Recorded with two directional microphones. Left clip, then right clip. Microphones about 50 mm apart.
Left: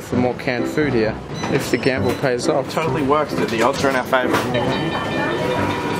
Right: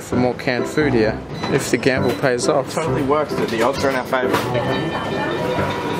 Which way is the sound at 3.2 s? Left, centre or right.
Centre.